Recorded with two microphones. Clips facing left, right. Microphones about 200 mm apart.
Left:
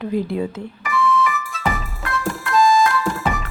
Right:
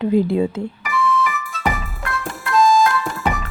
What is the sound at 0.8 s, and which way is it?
Music, centre (ahead or behind).